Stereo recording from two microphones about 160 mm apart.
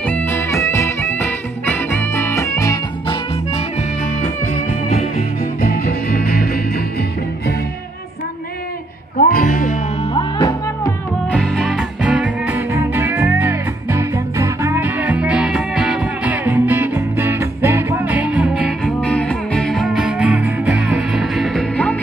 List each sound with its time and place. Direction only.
0.0 s music: 10° left (ahead or behind)
3.5 s music: 50° left (ahead or behind)
5.4 s music: 65° left (ahead or behind)
9.2 s music: 60° left (ahead or behind)
10.1 s music: 25° left (ahead or behind)
11.2 s music: 5° left (ahead or behind)
18.9 s music: 5° left (ahead or behind)